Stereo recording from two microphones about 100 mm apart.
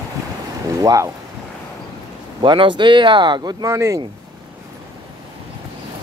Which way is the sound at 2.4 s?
55° right (ahead or behind).